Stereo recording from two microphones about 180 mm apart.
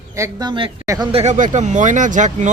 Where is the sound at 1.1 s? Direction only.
35° right (ahead or behind).